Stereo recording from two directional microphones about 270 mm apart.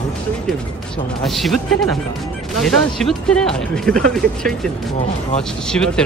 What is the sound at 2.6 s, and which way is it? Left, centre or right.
Speech, centre.